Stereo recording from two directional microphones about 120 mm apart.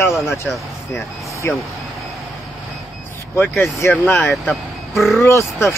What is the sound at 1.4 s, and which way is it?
Speech, 20° left (ahead or behind).